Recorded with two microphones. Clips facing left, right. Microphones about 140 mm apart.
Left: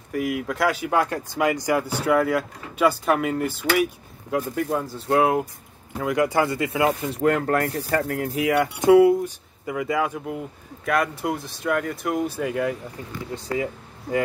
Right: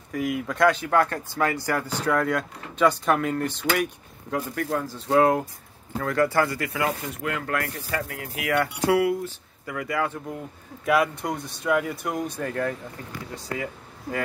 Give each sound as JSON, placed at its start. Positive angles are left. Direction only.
{"t": 0.1, "sound": "speech", "side_deg": 0}
{"t": 5.9, "sound": "speech", "side_deg": 15}
{"t": 7.2, "sound": "speech", "side_deg": 40}
{"t": 8.5, "sound": "speech", "side_deg": 20}
{"t": 10.9, "sound": "speech", "side_deg": 0}